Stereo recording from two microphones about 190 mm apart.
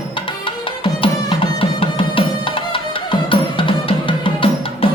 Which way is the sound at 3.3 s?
25° left (ahead or behind).